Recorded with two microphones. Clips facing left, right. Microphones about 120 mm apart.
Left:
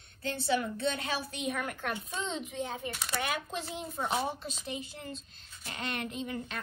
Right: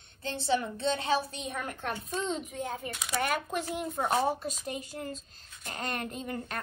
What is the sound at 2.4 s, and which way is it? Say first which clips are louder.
Speech: even; 45° right (ahead or behind).